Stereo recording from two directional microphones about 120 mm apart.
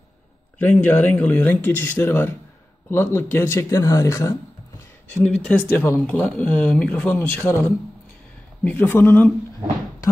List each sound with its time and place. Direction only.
0.6 s speech: 15° left (ahead or behind)
5.1 s speech: 5° left (ahead or behind)